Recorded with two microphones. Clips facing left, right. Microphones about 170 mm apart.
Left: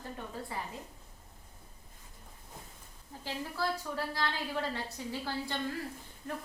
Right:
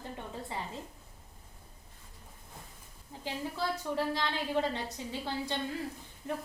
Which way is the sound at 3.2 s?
20° right (ahead or behind).